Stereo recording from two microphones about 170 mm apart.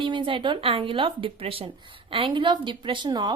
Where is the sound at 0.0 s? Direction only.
30° right (ahead or behind).